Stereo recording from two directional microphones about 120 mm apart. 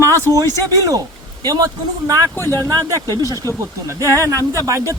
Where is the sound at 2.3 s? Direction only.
20° left (ahead or behind).